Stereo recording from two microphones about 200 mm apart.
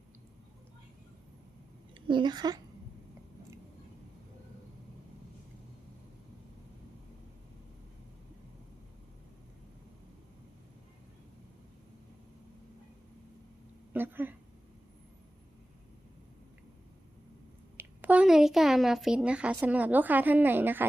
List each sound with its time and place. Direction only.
2.0 s a woman's voice: 20° right (ahead or behind)
13.9 s a sound: 10° right (ahead or behind)
17.7 s speech: 10° right (ahead or behind)